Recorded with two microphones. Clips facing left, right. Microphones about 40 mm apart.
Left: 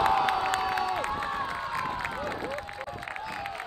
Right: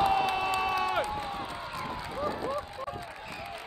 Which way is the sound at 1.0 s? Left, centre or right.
Left.